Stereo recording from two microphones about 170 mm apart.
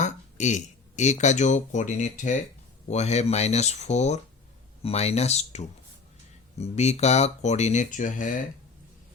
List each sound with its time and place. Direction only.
0.0 s speech: 45° left (ahead or behind)